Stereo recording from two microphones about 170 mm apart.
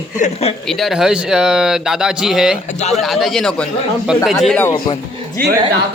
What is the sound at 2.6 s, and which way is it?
Speech, 40° left (ahead or behind).